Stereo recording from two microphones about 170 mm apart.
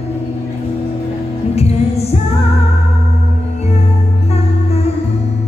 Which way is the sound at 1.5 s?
40° left (ahead or behind).